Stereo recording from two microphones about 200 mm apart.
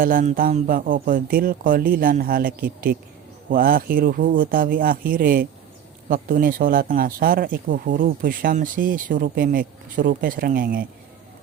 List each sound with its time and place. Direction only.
0.0 s speech: 40° right (ahead or behind)